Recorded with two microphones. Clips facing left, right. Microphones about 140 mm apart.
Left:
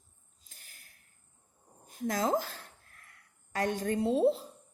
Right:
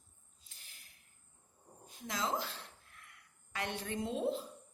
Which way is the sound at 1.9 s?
50° left (ahead or behind).